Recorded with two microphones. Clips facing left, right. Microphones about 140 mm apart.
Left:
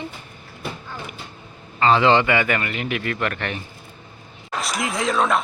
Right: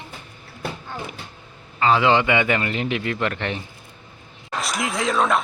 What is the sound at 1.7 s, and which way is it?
A man's voice, 5° right (ahead or behind).